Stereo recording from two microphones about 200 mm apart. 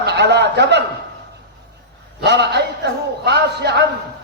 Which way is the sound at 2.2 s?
55° right (ahead or behind).